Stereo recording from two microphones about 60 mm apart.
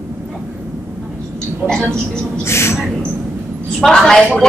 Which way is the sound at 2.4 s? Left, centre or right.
Left.